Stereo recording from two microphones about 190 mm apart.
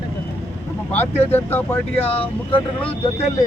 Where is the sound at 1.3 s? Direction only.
10° left (ahead or behind).